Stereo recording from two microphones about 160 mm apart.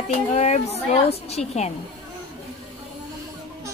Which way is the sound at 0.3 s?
45° left (ahead or behind).